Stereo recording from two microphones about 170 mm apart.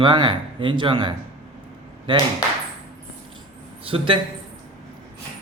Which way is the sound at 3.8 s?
30° right (ahead or behind).